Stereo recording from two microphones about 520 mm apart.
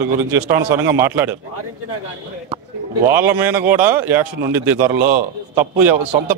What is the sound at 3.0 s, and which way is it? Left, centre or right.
Speech, centre.